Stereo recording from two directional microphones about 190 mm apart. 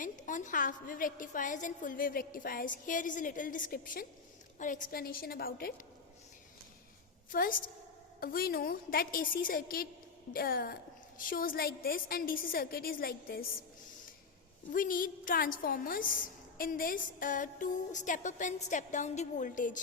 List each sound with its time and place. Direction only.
0.0 s a woman's voice: 40° left (ahead or behind)
7.3 s a woman's voice: 50° left (ahead or behind)
14.7 s a woman's voice: 50° left (ahead or behind)
16.6 s music: 50° left (ahead or behind)